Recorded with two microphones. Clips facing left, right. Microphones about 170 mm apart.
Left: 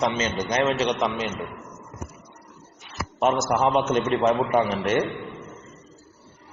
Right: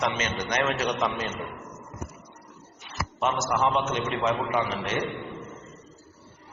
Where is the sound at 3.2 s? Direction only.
45° left (ahead or behind).